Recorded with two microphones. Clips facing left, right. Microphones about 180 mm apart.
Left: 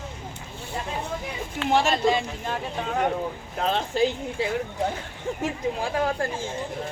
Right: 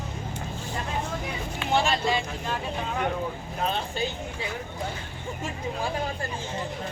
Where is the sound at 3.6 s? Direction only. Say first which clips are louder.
Left 4 dB; 90° left.